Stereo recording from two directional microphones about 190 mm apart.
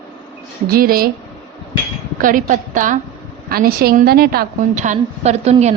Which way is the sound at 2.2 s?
45° right (ahead or behind).